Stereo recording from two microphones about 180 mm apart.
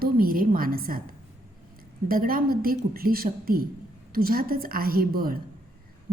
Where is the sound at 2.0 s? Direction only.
55° right (ahead or behind).